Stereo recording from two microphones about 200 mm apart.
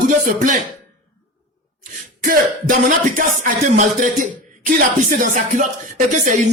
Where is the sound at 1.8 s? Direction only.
40° right (ahead or behind).